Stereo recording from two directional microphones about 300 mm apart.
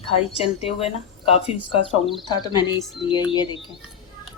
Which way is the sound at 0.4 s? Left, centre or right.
Centre.